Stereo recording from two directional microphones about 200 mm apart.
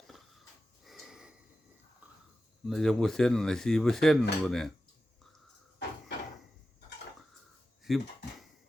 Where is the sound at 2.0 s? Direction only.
10° right (ahead or behind).